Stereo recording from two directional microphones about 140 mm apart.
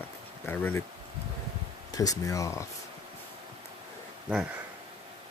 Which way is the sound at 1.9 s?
25° left (ahead or behind).